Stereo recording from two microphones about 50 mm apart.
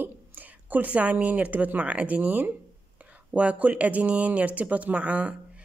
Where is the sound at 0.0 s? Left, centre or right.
Right.